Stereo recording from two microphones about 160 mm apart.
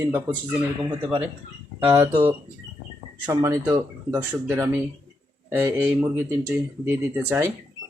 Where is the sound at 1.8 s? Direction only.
15° right (ahead or behind).